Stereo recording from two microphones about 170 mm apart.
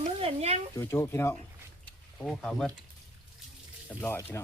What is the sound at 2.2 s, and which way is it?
Speech, 5° left (ahead or behind).